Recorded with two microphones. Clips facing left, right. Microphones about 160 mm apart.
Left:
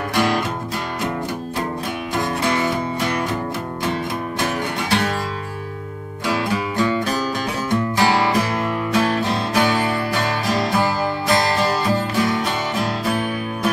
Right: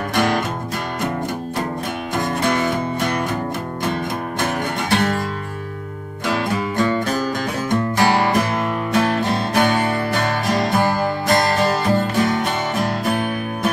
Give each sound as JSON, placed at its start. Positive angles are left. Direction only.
{"t": 0.1, "sound": "music", "side_deg": -50}
{"t": 2.1, "sound": "music", "side_deg": -50}
{"t": 4.4, "sound": "music", "side_deg": -50}
{"t": 6.2, "sound": "music", "side_deg": -50}